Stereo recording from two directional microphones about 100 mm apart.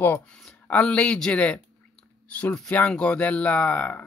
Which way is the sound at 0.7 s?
10° left (ahead or behind).